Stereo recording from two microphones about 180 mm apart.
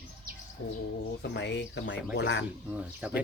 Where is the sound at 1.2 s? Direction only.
70° left (ahead or behind).